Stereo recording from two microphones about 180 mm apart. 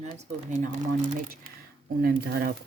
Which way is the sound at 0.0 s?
40° right (ahead or behind).